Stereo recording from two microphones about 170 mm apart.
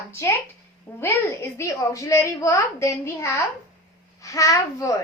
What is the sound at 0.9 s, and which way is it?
A woman's voice, 15° left (ahead or behind).